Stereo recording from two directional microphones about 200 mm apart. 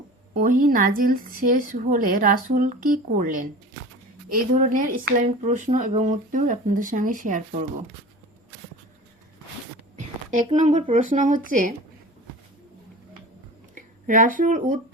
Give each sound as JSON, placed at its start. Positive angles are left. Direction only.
{"t": 0.3, "sound": "speech", "side_deg": -40}
{"t": 10.3, "sound": "speech", "side_deg": -35}
{"t": 13.7, "sound": "speech", "side_deg": -40}